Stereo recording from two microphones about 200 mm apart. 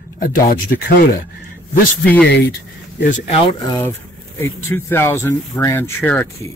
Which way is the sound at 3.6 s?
20° left (ahead or behind).